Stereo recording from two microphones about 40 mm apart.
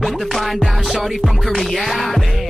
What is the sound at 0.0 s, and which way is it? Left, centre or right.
Music, centre.